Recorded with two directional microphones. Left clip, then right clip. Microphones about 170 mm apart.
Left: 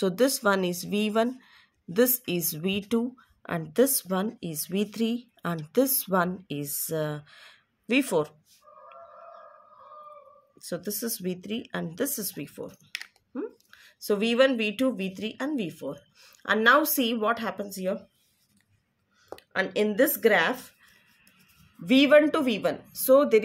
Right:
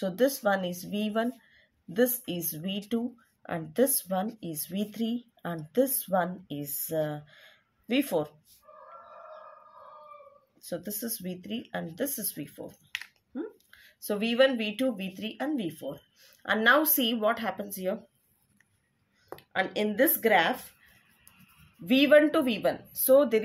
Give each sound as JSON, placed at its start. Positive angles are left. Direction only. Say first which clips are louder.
{"t": 0.0, "sound": "speech", "louder": "left 3 dB", "side_deg": 55}
{"t": 10.6, "sound": "speech", "louder": "left 3 dB", "side_deg": 45}
{"t": 19.3, "sound": "speech", "louder": "left 2 dB", "side_deg": 30}
{"t": 21.8, "sound": "speech", "louder": "left 2 dB", "side_deg": 30}